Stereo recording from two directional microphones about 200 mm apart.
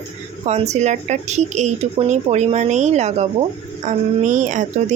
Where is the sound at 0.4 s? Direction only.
35° right (ahead or behind).